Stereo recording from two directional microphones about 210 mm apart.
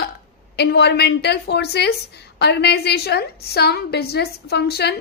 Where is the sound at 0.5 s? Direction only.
50° left (ahead or behind).